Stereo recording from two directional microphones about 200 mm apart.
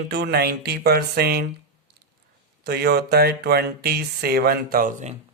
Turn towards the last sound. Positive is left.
turn(degrees=-40)  # may be behind; listen again after turning